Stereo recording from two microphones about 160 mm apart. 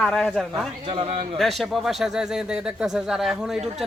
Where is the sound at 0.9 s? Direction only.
35° right (ahead or behind).